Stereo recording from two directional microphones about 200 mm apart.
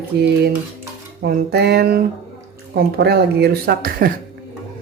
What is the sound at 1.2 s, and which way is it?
Speech, 55° right (ahead or behind).